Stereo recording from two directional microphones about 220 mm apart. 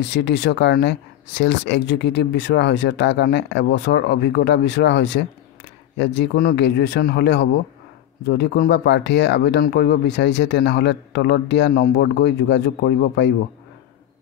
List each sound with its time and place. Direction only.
0.0 s speech: 50° left (ahead or behind)